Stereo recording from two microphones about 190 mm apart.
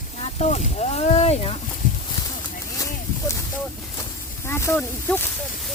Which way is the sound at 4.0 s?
15° left (ahead or behind).